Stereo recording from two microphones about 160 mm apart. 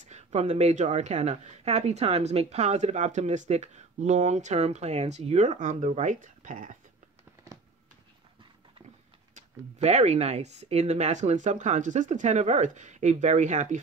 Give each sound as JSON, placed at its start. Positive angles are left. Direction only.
{"t": 0.0, "sound": "speech", "side_deg": -45}
{"t": 9.3, "sound": "speech", "side_deg": -45}